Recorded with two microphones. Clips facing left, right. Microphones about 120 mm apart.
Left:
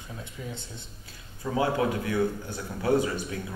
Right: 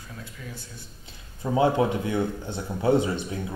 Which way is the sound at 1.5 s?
25° right (ahead or behind).